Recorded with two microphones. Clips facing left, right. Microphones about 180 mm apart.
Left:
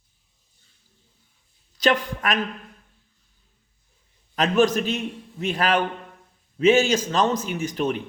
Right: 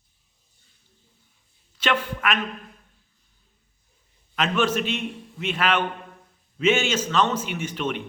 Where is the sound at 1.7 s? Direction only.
35° left (ahead or behind).